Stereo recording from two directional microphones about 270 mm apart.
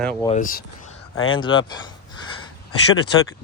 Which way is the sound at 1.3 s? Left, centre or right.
Centre.